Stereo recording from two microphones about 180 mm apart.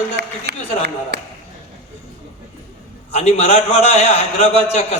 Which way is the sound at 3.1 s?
35° left (ahead or behind).